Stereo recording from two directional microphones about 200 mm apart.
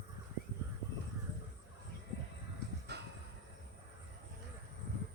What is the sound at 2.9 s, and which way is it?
Train, 55° right (ahead or behind).